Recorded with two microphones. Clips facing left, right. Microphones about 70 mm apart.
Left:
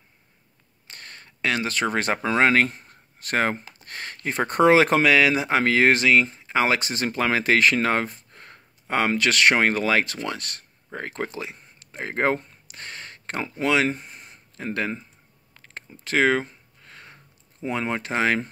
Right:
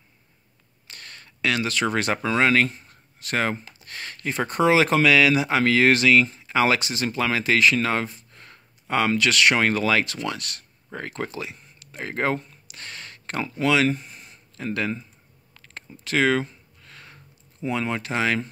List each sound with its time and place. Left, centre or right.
0.8 s speech: left
4.5 s speech: left
6.9 s speech: left
15.5 s a sound: left